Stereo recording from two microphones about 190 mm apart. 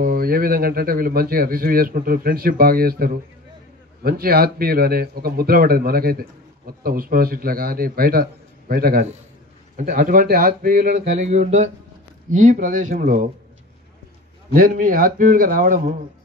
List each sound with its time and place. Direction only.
0.0 s a man's voice: 50° right (ahead or behind)
11.1 s a sound: 35° right (ahead or behind)
12.4 s a man's voice: 45° right (ahead or behind)
14.5 s a man's voice: 45° right (ahead or behind)